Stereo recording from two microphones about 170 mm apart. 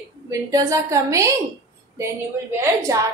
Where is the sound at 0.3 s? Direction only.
20° right (ahead or behind).